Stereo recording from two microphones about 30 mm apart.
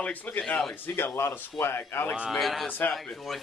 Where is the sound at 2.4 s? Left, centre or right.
Centre.